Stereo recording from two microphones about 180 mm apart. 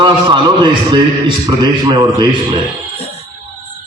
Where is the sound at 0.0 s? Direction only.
25° right (ahead or behind).